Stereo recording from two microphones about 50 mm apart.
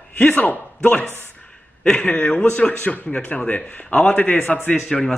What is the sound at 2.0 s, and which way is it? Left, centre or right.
A man's voice, left.